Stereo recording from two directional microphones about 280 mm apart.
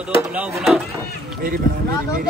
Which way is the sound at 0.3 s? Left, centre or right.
Centre.